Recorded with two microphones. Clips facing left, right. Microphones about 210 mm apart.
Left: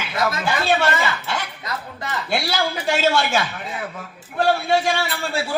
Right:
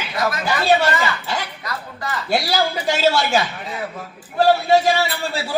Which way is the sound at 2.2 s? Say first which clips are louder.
Right 4 dB; 40° right (ahead or behind).